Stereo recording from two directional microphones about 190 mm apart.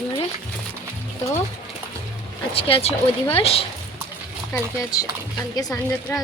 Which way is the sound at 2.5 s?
30° left (ahead or behind).